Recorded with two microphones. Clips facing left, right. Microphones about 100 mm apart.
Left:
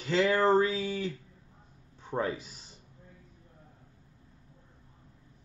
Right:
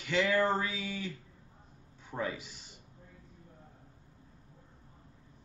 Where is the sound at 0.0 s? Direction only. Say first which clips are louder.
Left 3 dB; 35° left (ahead or behind).